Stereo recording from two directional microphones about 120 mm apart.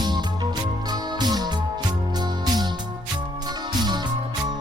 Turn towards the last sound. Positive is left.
turn(degrees=-35)  # may be behind; listen again after turning